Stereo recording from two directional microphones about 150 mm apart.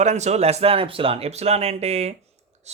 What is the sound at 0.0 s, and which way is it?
Speech, 50° right (ahead or behind).